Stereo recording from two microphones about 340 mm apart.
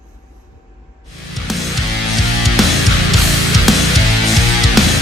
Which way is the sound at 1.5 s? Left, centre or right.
Centre.